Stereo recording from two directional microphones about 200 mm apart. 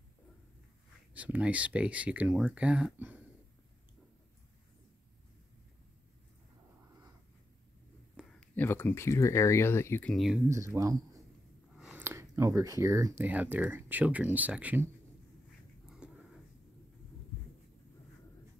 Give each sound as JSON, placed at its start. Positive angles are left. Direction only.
{"t": 1.1, "sound": "speech", "side_deg": -5}
{"t": 8.2, "sound": "speech", "side_deg": 5}
{"t": 10.1, "sound": "speech", "side_deg": 0}
{"t": 10.5, "sound": "speech", "side_deg": -15}
{"t": 11.7, "sound": "a sound", "side_deg": -5}
{"t": 13.2, "sound": "speech", "side_deg": -10}
{"t": 16.0, "sound": "a sound", "side_deg": -5}